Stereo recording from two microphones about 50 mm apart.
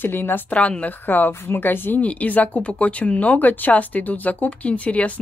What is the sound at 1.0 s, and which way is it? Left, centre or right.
Speech, left.